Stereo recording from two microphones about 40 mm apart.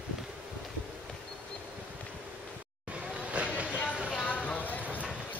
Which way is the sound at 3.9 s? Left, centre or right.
Right.